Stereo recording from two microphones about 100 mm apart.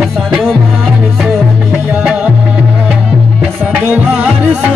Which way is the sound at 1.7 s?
15° right (ahead or behind).